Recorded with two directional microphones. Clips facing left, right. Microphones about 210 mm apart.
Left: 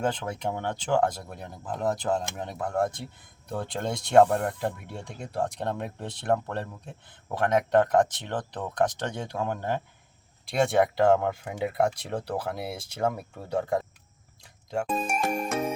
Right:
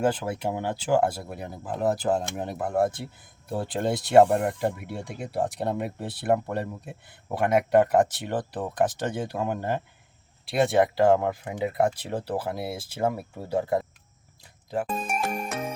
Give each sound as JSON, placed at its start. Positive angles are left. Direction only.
{"t": 0.0, "sound": "speech", "side_deg": -5}
{"t": 14.7, "sound": "music", "side_deg": 0}